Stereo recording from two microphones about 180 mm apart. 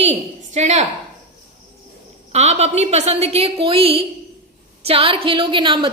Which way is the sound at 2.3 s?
35° right (ahead or behind).